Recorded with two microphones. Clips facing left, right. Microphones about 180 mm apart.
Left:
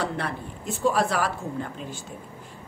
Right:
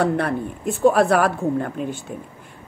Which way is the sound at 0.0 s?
55° right (ahead or behind).